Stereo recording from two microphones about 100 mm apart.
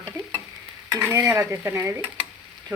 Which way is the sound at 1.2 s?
30° right (ahead or behind).